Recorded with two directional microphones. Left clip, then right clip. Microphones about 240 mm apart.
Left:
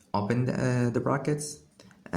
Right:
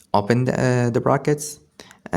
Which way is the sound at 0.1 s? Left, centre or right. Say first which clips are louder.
Right 10 dB; right.